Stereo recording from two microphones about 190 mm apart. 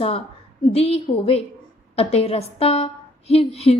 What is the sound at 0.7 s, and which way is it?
A woman's voice, 30° left (ahead or behind).